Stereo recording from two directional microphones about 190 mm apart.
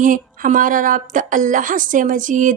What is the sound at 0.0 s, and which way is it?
Speech, 45° right (ahead or behind).